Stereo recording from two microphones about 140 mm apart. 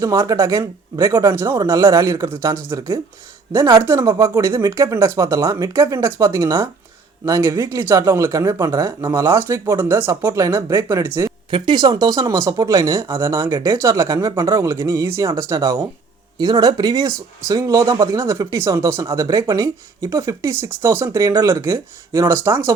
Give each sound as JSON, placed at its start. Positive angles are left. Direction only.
{"t": 0.0, "sound": "speech", "side_deg": -25}
{"t": 11.5, "sound": "speech", "side_deg": -35}